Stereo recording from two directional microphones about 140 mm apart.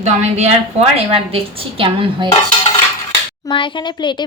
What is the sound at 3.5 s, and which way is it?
Speech, 35° left (ahead or behind).